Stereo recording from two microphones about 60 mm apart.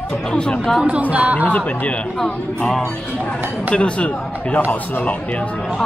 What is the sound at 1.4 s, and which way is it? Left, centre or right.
Speech, left.